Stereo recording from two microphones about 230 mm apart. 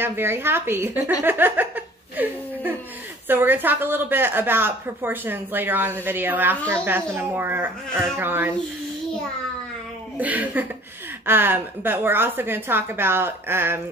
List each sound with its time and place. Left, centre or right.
0.0 s speech: centre
1.2 s a sound: centre
3.3 s speech: centre
10.1 s speech: centre